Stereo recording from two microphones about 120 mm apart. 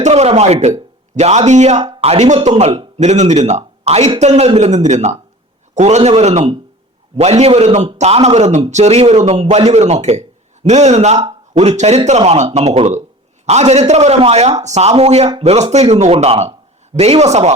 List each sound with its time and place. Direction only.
0.0 s a man's voice: 60° right (ahead or behind)
6.0 s a man's voice: 60° right (ahead or behind)